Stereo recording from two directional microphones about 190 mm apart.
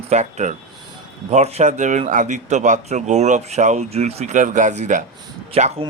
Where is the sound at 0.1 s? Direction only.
40° right (ahead or behind).